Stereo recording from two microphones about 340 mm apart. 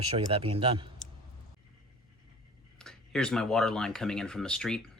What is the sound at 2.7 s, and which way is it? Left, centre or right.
Speech, centre.